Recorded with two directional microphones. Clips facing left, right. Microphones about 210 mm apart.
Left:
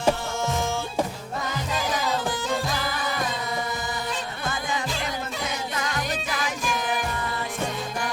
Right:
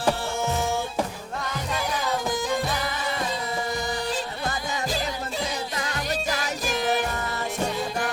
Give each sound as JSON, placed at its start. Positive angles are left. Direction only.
{"t": 6.3, "sound": "music", "side_deg": -40}